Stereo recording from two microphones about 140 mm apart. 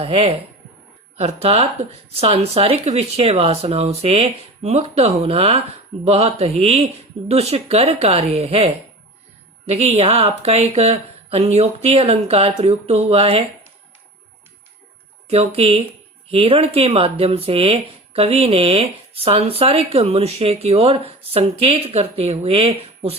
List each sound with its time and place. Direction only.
0.0 s speech: 45° right (ahead or behind)
15.3 s speech: 45° right (ahead or behind)